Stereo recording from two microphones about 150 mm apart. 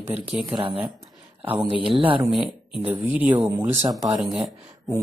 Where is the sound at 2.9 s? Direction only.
10° right (ahead or behind).